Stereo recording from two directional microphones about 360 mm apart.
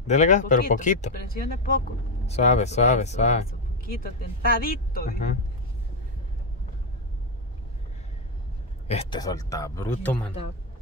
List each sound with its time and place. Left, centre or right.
0.0 s speech: centre
4.6 s speech: left
8.8 s a man's voice: centre